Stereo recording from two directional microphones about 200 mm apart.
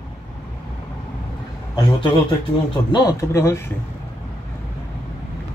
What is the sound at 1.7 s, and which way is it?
A man's voice, 25° left (ahead or behind).